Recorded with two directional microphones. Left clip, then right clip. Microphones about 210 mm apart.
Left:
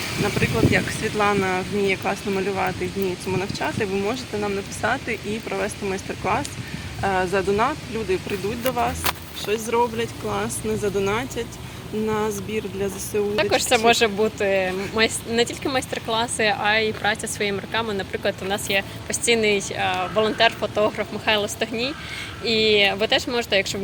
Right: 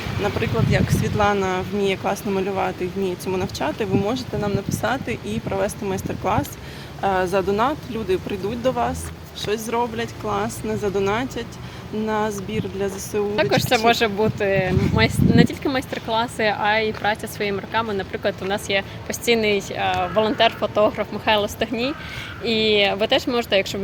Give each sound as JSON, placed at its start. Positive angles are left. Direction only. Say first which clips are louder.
{"t": 0.3, "sound": "speech", "louder": "left 4 dB", "side_deg": -55}
{"t": 13.3, "sound": "speech", "louder": "right 1 dB", "side_deg": -30}